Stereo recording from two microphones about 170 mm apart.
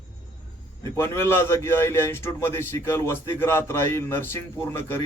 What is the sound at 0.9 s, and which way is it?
Speech, 15° left (ahead or behind).